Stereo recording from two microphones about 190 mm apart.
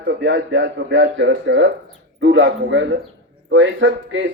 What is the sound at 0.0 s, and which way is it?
A man's voice, 75° right (ahead or behind).